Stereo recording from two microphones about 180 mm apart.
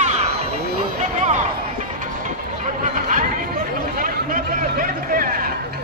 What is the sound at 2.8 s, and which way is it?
Chatter, 45° right (ahead or behind).